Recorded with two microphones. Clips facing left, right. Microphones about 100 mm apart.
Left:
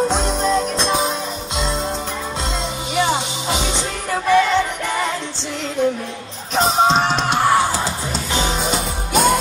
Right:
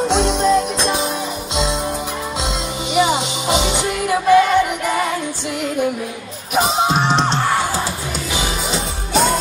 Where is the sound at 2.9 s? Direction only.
10° right (ahead or behind).